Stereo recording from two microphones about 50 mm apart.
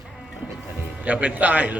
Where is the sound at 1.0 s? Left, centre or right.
Right.